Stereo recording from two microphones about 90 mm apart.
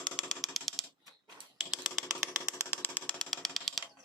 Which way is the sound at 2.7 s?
20° left (ahead or behind).